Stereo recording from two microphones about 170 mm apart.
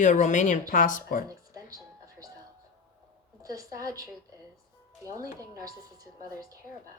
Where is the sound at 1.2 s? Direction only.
20° right (ahead or behind).